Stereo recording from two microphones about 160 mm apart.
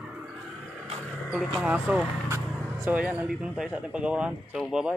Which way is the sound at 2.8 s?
10° right (ahead or behind).